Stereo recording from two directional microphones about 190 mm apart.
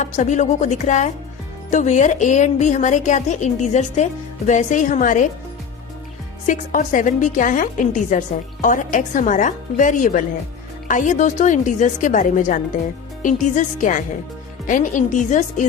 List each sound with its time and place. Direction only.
0.0 s a woman's voice: 40° left (ahead or behind)
6.4 s a woman's voice: 45° left (ahead or behind)